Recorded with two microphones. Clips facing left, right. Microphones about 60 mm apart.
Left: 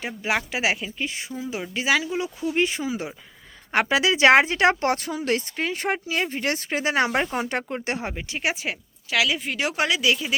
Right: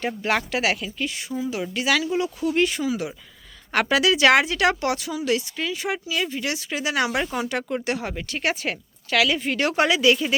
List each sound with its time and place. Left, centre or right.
0.0 s speech: centre; by 8.1 s left
8.1 s speech: centre